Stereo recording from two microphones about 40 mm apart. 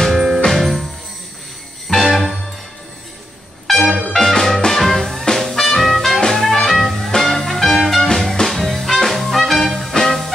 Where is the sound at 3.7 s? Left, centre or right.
Centre.